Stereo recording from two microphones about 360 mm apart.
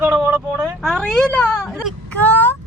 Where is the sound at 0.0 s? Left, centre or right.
Centre.